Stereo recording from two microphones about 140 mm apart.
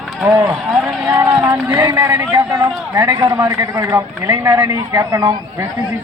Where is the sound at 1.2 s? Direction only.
15° right (ahead or behind).